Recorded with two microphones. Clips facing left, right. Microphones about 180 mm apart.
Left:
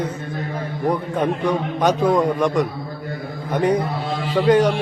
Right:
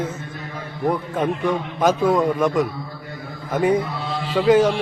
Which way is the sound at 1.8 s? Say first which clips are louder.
Even; centre (ahead or behind).